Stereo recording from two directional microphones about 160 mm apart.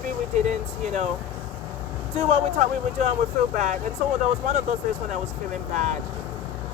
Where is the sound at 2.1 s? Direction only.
45° right (ahead or behind).